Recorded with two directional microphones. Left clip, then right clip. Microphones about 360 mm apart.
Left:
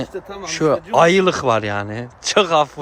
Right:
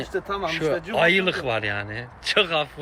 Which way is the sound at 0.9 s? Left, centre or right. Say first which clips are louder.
Left 6 dB; centre.